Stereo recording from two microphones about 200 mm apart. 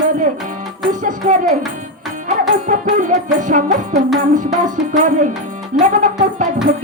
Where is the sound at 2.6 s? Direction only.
40° right (ahead or behind).